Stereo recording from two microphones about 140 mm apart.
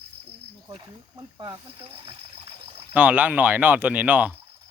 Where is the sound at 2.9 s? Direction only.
10° right (ahead or behind).